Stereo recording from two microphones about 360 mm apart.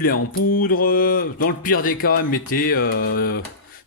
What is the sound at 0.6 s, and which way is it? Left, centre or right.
Speech, left.